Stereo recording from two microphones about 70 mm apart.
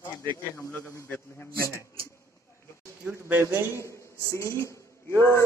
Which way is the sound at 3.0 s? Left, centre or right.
Right.